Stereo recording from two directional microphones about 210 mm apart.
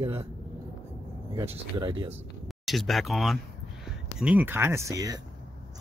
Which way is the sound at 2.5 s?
Centre (ahead or behind).